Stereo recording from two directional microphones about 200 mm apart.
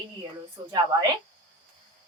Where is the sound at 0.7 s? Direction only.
20° right (ahead or behind).